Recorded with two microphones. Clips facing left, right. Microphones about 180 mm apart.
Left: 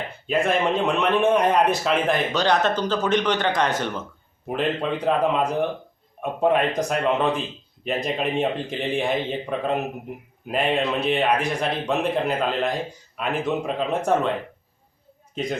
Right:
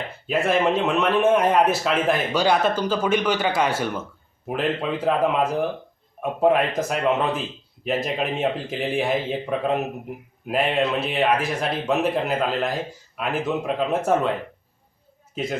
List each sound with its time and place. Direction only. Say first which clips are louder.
0.3 s a man's voice: right 1 dB; 5° right (ahead or behind)